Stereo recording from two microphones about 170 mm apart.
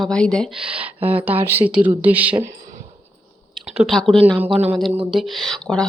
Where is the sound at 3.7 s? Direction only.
Centre (ahead or behind).